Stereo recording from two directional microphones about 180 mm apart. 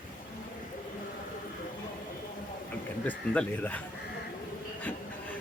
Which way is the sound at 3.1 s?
10° left (ahead or behind).